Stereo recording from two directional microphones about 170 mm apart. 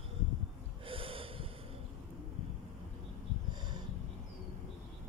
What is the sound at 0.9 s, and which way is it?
Snort, 30° right (ahead or behind).